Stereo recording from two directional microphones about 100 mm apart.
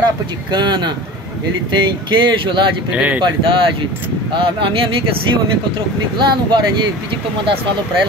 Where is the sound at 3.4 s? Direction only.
60° right (ahead or behind).